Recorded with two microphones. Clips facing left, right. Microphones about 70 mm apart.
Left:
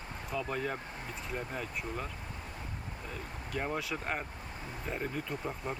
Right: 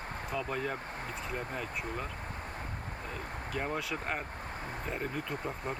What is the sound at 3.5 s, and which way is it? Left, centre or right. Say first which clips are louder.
Speech: even; centre.